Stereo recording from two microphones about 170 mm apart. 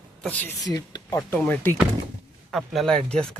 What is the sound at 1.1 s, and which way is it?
Speech, 10° left (ahead or behind).